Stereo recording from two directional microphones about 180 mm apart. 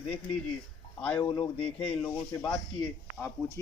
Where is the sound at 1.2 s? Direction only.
30° left (ahead or behind).